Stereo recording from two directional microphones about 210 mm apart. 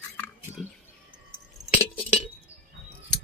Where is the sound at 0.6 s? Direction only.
Centre (ahead or behind).